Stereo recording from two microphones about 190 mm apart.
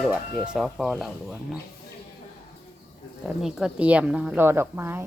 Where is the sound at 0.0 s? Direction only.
5° right (ahead or behind).